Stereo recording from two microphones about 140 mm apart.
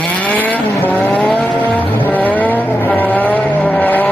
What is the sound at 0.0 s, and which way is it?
Vehicle, 10° left (ahead or behind).